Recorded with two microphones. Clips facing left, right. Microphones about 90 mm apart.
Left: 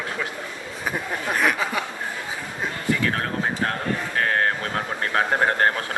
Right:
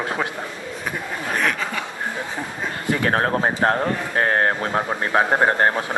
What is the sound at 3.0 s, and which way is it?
Speech, 40° right (ahead or behind).